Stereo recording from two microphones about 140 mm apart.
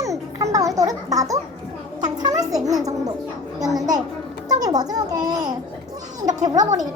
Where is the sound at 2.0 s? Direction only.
30° right (ahead or behind).